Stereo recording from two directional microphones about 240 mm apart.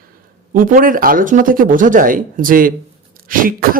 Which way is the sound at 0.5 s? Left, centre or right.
Right.